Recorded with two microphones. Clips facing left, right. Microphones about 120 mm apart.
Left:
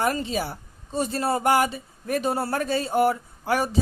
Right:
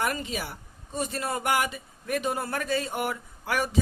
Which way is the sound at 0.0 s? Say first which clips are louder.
Left 5 dB; 30° left (ahead or behind).